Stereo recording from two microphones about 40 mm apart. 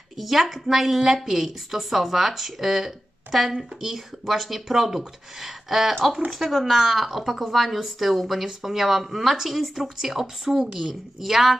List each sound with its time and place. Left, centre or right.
0.2 s a woman's voice: centre